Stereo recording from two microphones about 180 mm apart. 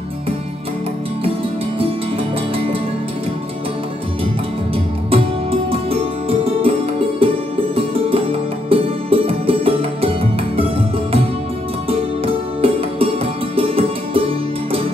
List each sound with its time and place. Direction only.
2.5 s music: 30° right (ahead or behind)
5.1 s music: 30° right (ahead or behind)
8.6 s music: 30° right (ahead or behind)
12.6 s music: 30° right (ahead or behind)